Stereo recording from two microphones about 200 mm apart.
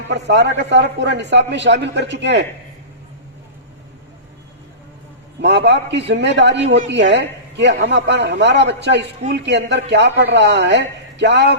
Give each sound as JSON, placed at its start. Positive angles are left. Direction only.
{"t": 0.1, "sound": "a man's voice", "side_deg": -60}
{"t": 5.4, "sound": "a man's voice", "side_deg": -60}